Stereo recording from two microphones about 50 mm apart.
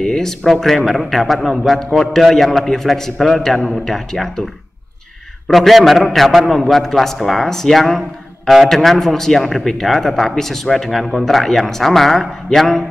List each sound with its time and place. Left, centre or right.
0.0 s a man's voice: centre
5.5 s a man's voice: centre